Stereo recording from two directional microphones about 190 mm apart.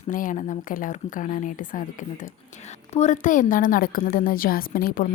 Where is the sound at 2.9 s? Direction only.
40° left (ahead or behind).